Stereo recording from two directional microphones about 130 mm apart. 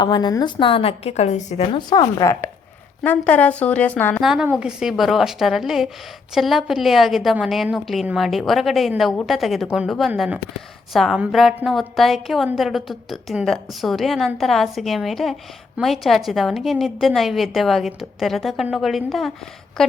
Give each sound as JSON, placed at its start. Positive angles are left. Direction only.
{"t": 0.0, "sound": "a woman's voice", "side_deg": 35}
{"t": 1.7, "sound": "speech", "side_deg": 35}
{"t": 4.2, "sound": "a woman's voice", "side_deg": -5}